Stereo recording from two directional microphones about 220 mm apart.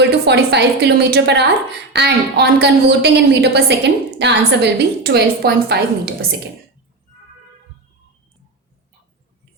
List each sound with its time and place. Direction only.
0.0 s a woman's voice: 50° right (ahead or behind)